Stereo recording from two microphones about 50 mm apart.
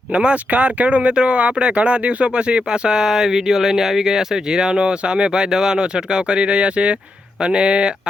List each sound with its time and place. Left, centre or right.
0.1 s speech: centre